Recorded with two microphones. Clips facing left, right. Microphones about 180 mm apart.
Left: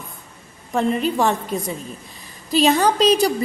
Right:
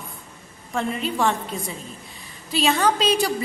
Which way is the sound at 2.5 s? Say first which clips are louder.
Left 4 dB; 40° left (ahead or behind).